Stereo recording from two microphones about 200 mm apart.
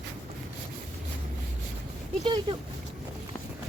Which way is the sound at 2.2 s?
25° right (ahead or behind).